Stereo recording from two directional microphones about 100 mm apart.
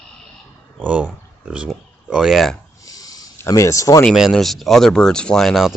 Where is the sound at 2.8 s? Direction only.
35° left (ahead or behind).